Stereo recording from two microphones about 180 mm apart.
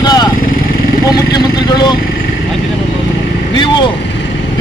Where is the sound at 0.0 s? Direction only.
20° left (ahead or behind).